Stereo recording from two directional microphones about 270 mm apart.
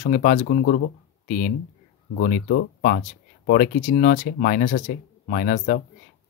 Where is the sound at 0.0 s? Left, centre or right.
Left.